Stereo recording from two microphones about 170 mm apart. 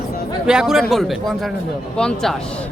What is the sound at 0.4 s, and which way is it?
A man's voice, 5° right (ahead or behind).